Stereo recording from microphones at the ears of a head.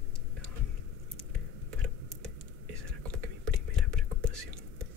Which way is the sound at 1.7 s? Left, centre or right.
Right.